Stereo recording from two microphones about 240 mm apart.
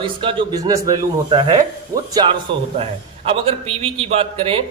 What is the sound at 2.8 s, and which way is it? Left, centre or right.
Speech, right.